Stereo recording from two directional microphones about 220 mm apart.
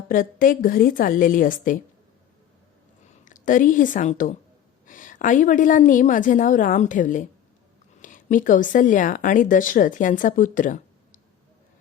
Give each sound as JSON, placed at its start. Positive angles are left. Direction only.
{"t": 0.1, "sound": "a woman's voice", "side_deg": 40}
{"t": 3.2, "sound": "a woman's voice", "side_deg": 35}